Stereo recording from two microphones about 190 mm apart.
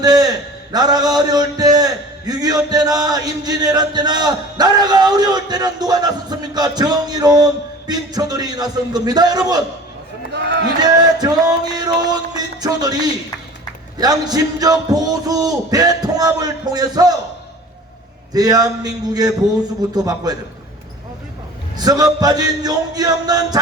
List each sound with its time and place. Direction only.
0.0 s a sound: 20° right (ahead or behind)
0.7 s a man's voice: 20° right (ahead or behind)
10.3 s run: 65° right (ahead or behind)
10.8 s a man's voice: 20° right (ahead or behind)
18.3 s a man's voice: 20° right (ahead or behind)
21.8 s a man's voice: 20° right (ahead or behind)